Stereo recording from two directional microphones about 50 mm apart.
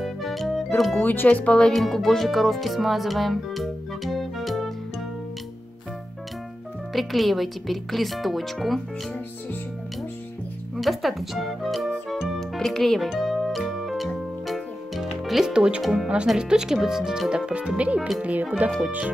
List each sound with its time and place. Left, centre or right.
0.0 s music: centre
0.7 s speech: centre
1.0 s speech: left
1.3 s speech: left
1.7 s speech: centre
6.9 s speech: centre
10.8 s music: centre
15.5 s speech: centre
17.5 s speech: right